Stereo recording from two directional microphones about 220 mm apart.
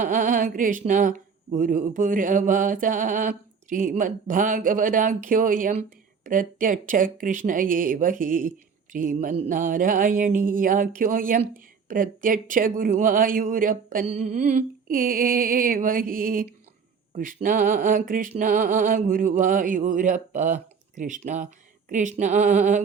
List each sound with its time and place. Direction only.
0.0 s speech: 35° right (ahead or behind)